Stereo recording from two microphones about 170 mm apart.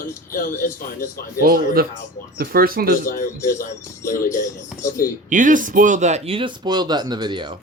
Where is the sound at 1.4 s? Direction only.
60° right (ahead or behind).